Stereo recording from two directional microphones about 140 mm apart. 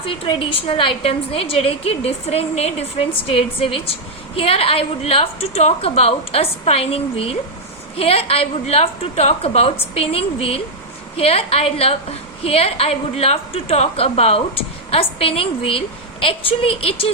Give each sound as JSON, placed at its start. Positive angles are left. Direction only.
{"t": 0.0, "sound": "a woman's voice", "side_deg": 40}